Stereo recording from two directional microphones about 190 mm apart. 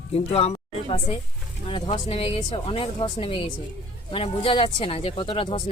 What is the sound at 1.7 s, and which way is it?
Speech, 30° left (ahead or behind).